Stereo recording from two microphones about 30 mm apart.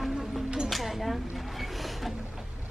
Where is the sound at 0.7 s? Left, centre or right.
Centre.